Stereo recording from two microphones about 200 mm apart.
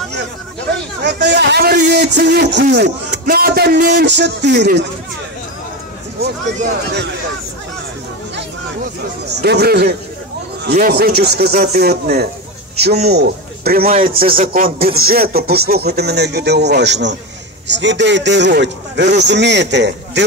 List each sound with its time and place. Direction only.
0.2 s a man's voice: 60° right (ahead or behind)
9.3 s a man's voice: 55° right (ahead or behind)
13.9 s speech: 25° right (ahead or behind)
14.2 s a man's voice: 45° right (ahead or behind); by 20.2 s 60° right (ahead or behind)